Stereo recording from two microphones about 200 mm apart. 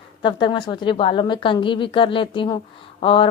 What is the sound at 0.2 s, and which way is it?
A woman's voice, 25° left (ahead or behind).